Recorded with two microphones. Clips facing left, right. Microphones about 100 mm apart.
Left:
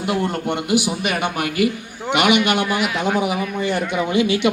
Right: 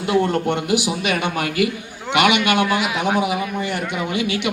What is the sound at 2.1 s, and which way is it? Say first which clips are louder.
Speech: right 1 dB; 15° left (ahead or behind).